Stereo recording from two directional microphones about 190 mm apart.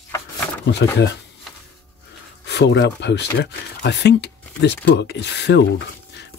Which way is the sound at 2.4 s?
65° left (ahead or behind).